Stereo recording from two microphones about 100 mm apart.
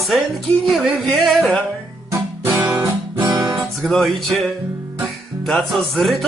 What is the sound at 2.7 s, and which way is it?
Guitar, 25° right (ahead or behind).